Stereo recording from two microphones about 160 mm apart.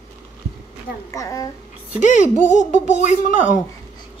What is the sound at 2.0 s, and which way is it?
Speech, 50° left (ahead or behind).